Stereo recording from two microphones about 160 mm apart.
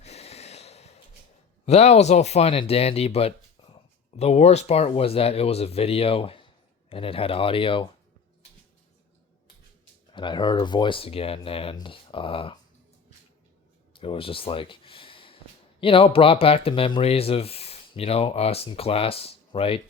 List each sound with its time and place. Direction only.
0.0 s a sound: 40° left (ahead or behind)
1.6 s speech: 45° left (ahead or behind)
10.1 s speech: 30° left (ahead or behind)
13.9 s speech: 35° left (ahead or behind)